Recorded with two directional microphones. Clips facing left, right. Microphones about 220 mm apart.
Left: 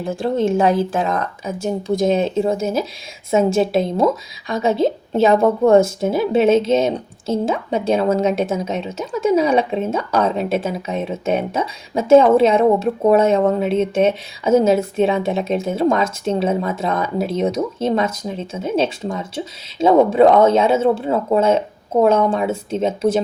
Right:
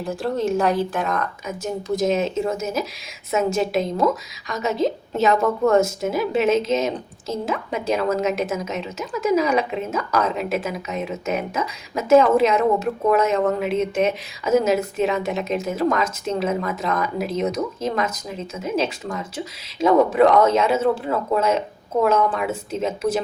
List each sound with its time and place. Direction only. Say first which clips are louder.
0.0 s a woman's voice: left 4 dB; 25° left (ahead or behind)